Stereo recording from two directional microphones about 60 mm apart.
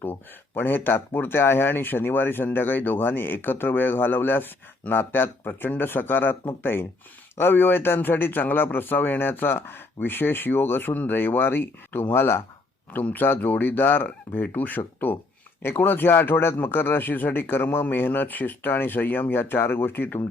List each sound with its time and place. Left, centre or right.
0.0 s a man's voice: left
12.9 s a man's voice: left